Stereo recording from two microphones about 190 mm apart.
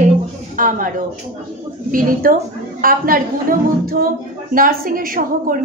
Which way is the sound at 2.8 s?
50° right (ahead or behind).